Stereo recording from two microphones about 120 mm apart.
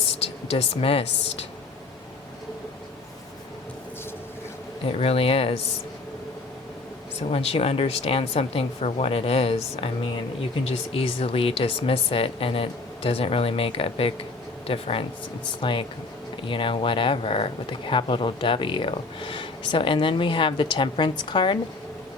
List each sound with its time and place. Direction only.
0.2 s speech: 60° left (ahead or behind)
4.9 s speech: 55° left (ahead or behind)
7.3 s speech: 55° left (ahead or behind)